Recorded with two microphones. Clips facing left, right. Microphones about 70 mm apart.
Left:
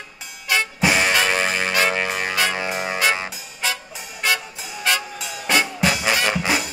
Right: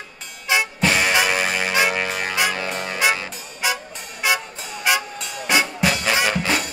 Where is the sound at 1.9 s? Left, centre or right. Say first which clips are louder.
Even; centre.